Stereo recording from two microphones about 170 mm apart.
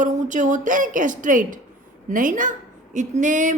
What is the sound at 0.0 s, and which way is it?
Speech, 50° right (ahead or behind).